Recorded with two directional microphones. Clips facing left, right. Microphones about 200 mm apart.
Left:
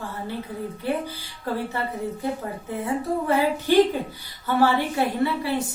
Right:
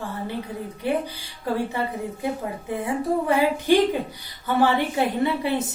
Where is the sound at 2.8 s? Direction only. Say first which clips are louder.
Right 1 dB; 15° right (ahead or behind).